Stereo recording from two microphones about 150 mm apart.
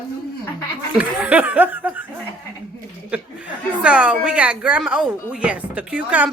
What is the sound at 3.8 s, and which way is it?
A woman's voice, 10° right (ahead or behind).